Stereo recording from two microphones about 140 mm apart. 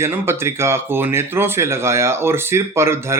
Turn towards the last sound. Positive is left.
turn(degrees=-20)  # may be behind; listen again after turning